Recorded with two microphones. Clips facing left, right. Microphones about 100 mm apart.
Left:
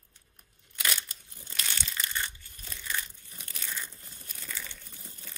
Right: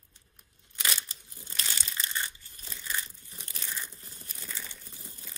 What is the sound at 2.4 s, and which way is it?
Crumpling, 25° right (ahead or behind).